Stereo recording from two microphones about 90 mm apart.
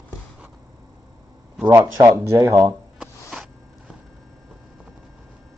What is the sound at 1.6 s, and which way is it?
Speech, 35° right (ahead or behind).